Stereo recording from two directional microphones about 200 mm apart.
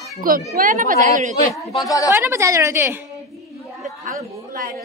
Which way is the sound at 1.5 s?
15° left (ahead or behind).